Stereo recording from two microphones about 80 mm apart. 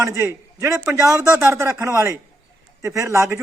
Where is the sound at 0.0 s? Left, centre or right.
Right.